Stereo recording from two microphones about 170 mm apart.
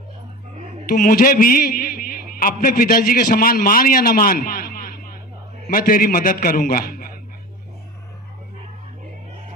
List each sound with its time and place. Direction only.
0.9 s a man's voice: 55° left (ahead or behind)